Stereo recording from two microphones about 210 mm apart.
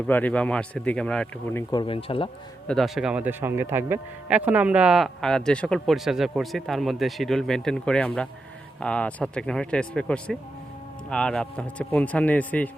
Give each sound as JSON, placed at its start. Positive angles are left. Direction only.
{"t": 0.1, "sound": "a man's voice", "side_deg": 10}
{"t": 1.7, "sound": "speech", "side_deg": 25}
{"t": 2.6, "sound": "a man's voice", "side_deg": 0}